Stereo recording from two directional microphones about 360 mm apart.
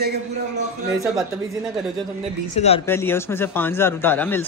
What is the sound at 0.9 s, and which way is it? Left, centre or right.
Speech, centre.